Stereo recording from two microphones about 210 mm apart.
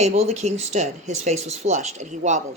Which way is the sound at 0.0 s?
30° right (ahead or behind).